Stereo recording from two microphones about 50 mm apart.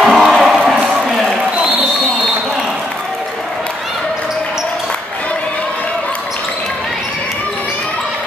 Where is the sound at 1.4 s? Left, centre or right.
Right.